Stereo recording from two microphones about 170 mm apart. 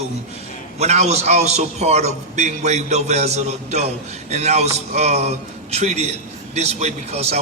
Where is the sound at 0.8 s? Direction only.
40° right (ahead or behind).